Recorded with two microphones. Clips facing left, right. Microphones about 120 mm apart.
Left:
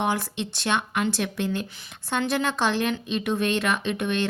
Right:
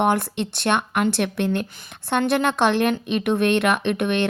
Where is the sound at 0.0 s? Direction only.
60° right (ahead or behind).